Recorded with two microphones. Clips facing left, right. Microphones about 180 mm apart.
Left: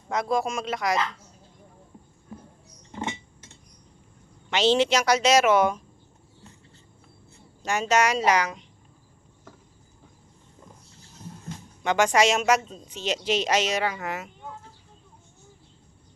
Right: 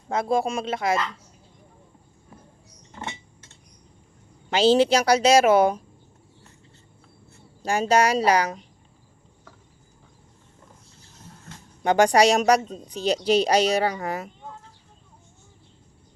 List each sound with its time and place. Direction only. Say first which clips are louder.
0.1 s speech: right 2 dB; 30° right (ahead or behind)
2.9 s a sound: left 4 dB; 15° left (ahead or behind)
4.4 s speech: right 4 dB; 35° right (ahead or behind)
7.6 s speech: right 3 dB; 35° right (ahead or behind)
11.8 s speech: right 4 dB; 35° right (ahead or behind)